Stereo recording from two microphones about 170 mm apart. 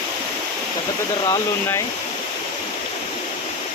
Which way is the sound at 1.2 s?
25° left (ahead or behind).